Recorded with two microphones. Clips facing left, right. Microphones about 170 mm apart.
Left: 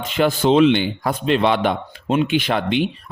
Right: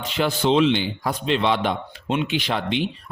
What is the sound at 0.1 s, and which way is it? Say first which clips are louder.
A man's voice: left 4 dB; 50° left (ahead or behind).